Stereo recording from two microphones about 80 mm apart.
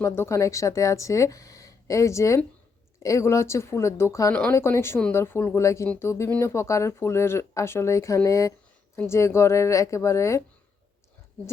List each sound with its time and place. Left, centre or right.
0.0 s a woman's voice: left
4.3 s speech: centre
4.5 s a woman's voice: left